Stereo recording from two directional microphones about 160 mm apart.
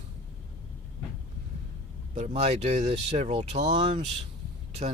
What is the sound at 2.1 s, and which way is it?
Speech, 45° right (ahead or behind).